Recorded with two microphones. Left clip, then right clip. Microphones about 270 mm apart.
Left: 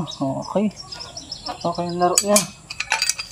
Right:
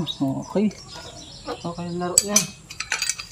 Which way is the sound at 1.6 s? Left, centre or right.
Left.